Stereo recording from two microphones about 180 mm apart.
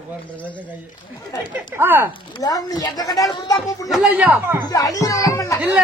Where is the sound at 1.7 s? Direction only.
10° right (ahead or behind).